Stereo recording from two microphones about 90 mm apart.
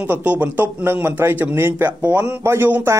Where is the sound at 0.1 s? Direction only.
20° right (ahead or behind).